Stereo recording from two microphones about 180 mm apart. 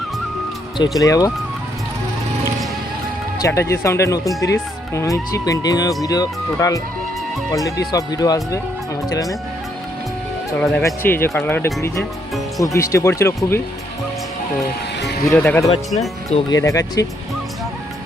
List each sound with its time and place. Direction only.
0.8 s speech: 20° left (ahead or behind)
3.3 s speech: 15° left (ahead or behind)
10.6 s speech: 5° left (ahead or behind)
15.3 s speech: 10° left (ahead or behind)